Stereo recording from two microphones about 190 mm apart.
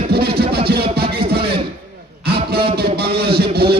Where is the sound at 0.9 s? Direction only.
55° right (ahead or behind).